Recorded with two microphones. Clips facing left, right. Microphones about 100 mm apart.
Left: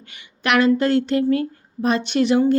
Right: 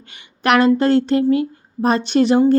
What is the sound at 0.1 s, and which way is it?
A woman's voice, 35° right (ahead or behind).